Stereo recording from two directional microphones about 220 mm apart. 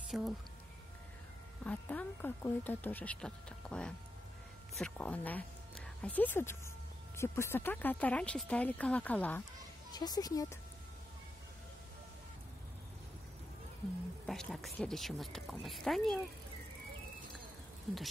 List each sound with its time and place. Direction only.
0.1 s speech: centre (ahead or behind)
1.6 s speech: 5° left (ahead or behind)
9.8 s speech: 20° left (ahead or behind)
14.2 s speech: centre (ahead or behind)